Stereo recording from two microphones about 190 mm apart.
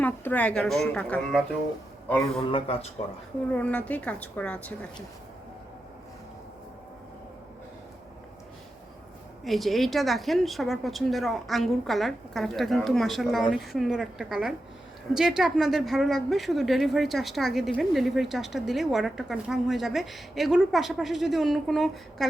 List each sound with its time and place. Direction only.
0.0 s speech: 10° left (ahead or behind)
2.5 s speech: 30° left (ahead or behind)
3.5 s a woman's voice: 5° left (ahead or behind)
9.4 s speech: centre (ahead or behind)